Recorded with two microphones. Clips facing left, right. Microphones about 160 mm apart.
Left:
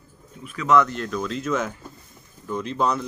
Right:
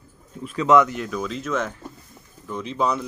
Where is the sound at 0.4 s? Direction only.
35° right (ahead or behind).